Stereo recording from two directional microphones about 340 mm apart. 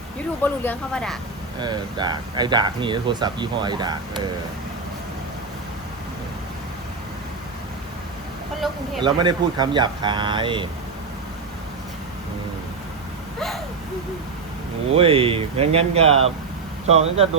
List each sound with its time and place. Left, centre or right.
0.4 s speech: centre
1.5 s speech: centre
8.6 s speech: centre
9.0 s speech: centre
14.9 s speech: centre